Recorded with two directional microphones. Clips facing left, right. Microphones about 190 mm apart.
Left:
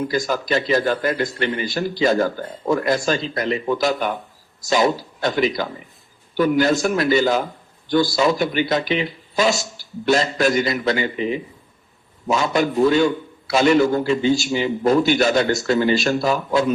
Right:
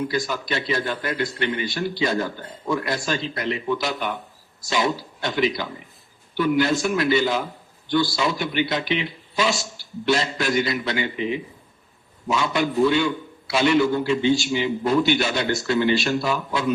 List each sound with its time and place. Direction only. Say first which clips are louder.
0.1 s a man's voice: left 5 dB; 45° left (ahead or behind)